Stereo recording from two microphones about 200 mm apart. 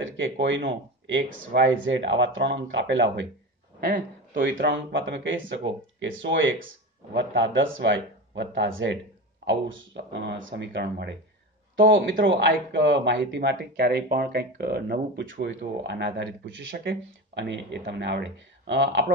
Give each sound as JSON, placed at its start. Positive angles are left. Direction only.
{"t": 0.0, "sound": "speech", "side_deg": -65}
{"t": 3.8, "sound": "speech", "side_deg": -45}
{"t": 4.4, "sound": "speech", "side_deg": -65}
{"t": 11.7, "sound": "speech", "side_deg": -70}